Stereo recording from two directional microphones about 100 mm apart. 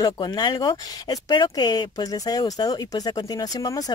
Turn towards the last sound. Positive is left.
turn(degrees=35)  # may be behind; listen again after turning